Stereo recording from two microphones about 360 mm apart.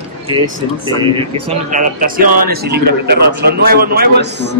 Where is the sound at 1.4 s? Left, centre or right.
Centre.